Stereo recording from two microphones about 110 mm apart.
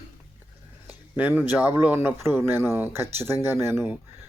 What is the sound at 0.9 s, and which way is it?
Speech, 15° right (ahead or behind).